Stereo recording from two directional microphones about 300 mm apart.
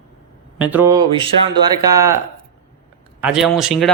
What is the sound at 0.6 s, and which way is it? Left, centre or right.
Speech, centre.